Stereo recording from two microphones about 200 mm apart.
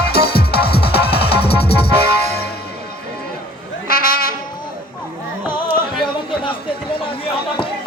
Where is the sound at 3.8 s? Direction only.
45° left (ahead or behind).